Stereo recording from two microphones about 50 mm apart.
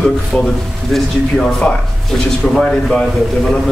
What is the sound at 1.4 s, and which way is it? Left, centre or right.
A man's voice, left.